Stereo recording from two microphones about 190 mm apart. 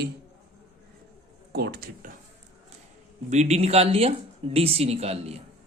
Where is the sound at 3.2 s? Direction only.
35° right (ahead or behind).